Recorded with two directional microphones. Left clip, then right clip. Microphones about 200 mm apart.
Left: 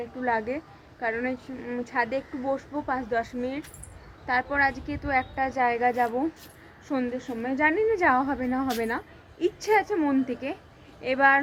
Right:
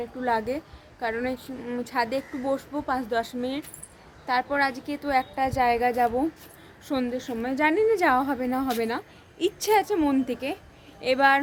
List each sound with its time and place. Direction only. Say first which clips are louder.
0.2 s a woman's voice: right 1 dB; 10° right (ahead or behind)